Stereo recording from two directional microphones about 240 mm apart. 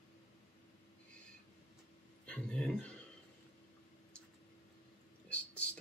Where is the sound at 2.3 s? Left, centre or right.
Centre.